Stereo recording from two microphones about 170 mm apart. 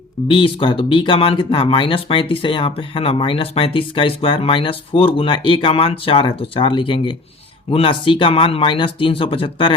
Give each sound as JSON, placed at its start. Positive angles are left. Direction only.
{"t": 0.3, "sound": "speech", "side_deg": 30}